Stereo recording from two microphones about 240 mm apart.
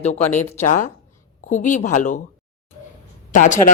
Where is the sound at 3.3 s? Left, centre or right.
Left.